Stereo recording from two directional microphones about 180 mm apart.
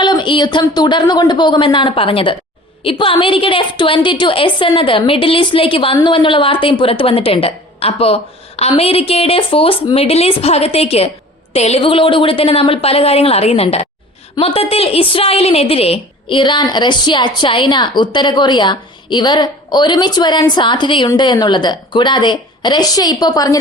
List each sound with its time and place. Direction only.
0.0 s a woman's voice: 25° left (ahead or behind)